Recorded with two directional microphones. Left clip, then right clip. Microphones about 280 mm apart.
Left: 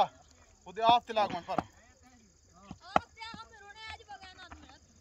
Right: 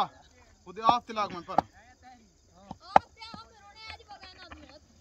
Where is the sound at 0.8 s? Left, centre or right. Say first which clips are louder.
Even; centre.